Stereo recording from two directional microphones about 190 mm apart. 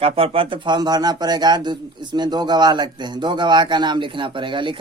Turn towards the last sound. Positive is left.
turn(degrees=-25)  # may be behind; listen again after turning